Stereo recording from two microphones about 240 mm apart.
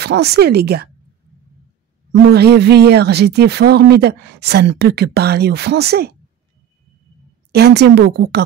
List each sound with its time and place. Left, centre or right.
0.0 s speech: right
2.3 s speech: right
7.5 s speech: right